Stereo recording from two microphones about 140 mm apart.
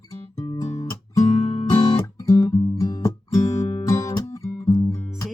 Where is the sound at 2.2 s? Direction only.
20° left (ahead or behind).